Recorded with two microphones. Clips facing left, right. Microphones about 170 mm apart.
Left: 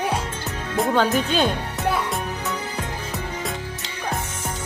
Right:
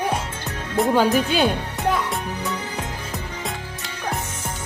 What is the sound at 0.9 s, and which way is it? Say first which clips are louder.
Speech: right 1 dB; 10° right (ahead or behind).